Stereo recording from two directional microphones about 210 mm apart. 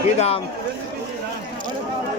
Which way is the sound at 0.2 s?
30° left (ahead or behind).